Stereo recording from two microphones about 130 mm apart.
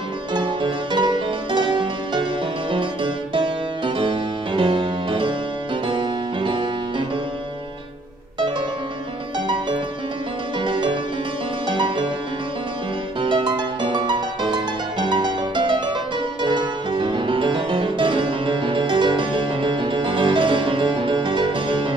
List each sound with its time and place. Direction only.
0.3 s music: 35° right (ahead or behind)
10.6 s music: 35° right (ahead or behind)
13.2 s music: 35° right (ahead or behind)